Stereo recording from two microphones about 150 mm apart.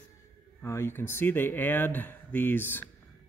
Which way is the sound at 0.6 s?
15° left (ahead or behind).